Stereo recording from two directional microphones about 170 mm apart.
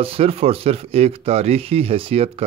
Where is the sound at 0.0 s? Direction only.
35° right (ahead or behind).